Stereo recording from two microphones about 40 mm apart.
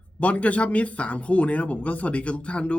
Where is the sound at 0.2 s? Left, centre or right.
Left.